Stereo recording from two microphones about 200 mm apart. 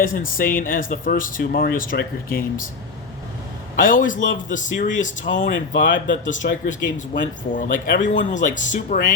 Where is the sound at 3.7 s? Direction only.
45° left (ahead or behind).